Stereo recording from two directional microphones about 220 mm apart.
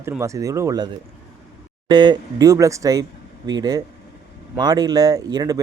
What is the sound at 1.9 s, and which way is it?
Speech, 20° right (ahead or behind).